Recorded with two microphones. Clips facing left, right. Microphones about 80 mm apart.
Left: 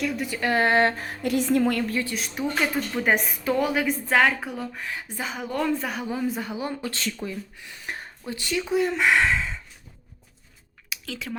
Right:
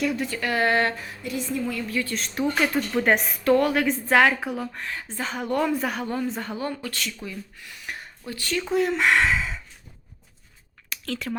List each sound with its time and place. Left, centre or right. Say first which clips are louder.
0.0 s a woman's voice: right 2 dB; centre
0.3 s speech: left 1 dB; left
0.9 s a woman's voice: left 6 dB; left
2.0 s a woman's voice: right 2 dB; centre
4.9 s a woman's voice: right 1 dB; centre
6.6 s speech: even; left
8.6 s speech: right 1 dB; centre
10.8 s a sound: right 4 dB; centre